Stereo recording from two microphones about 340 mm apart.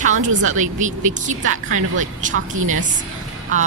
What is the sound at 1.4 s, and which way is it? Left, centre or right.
A woman's voice, right.